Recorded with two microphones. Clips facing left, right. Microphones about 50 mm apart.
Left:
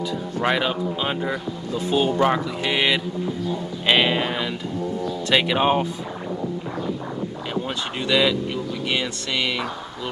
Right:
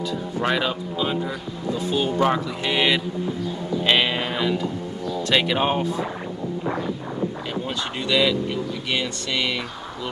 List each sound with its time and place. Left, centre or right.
0.4 s speech: centre
1.0 s speech: left
2.1 s mantra: centre
5.3 s speech: centre
8.1 s speech: centre